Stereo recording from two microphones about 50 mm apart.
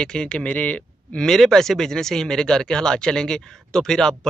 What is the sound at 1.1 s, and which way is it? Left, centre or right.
Speech, centre.